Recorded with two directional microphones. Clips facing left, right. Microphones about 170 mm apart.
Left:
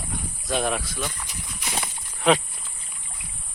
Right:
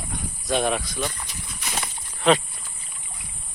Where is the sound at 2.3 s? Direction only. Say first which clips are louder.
Right 1 dB; 10° left (ahead or behind).